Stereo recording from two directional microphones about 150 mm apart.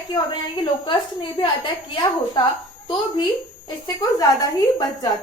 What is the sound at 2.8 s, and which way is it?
A woman's voice, 30° left (ahead or behind).